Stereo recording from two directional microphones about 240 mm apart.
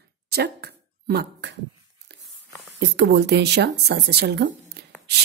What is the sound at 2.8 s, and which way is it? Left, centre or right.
A woman's voice, right.